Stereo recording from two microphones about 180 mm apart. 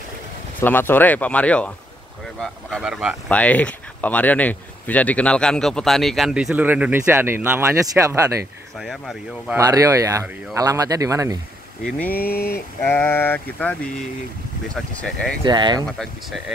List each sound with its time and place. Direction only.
0.6 s speech: 10° left (ahead or behind); by 3.2 s 5° right (ahead or behind)
3.3 s speech: 5° left (ahead or behind); by 8.3 s 15° right (ahead or behind)
8.7 s speech: centre (ahead or behind)
9.6 s speech: 20° right (ahead or behind)
12.1 s speech: 55° left (ahead or behind)
12.8 s speech: 10° left (ahead or behind)
15.4 s speech: 25° right (ahead or behind)
16.0 s speech: centre (ahead or behind)